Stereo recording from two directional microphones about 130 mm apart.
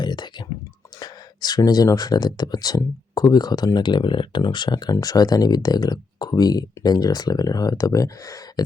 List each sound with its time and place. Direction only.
0.0 s speech: 35° left (ahead or behind)